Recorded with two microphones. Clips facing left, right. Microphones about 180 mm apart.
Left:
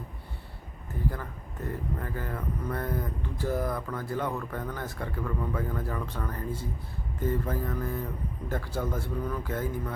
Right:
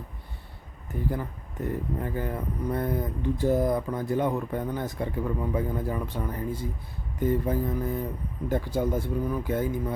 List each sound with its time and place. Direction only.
1.1 s speech: 20° right (ahead or behind)